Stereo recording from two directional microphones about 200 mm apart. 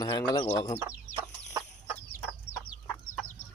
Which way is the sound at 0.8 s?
15° right (ahead or behind).